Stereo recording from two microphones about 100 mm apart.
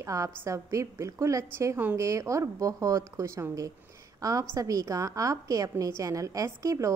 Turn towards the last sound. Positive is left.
turn(degrees=-35)  # may be behind; listen again after turning